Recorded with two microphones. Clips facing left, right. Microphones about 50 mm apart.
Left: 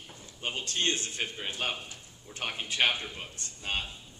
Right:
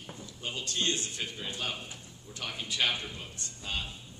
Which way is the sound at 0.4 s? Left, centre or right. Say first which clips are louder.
Left 2 dB; left.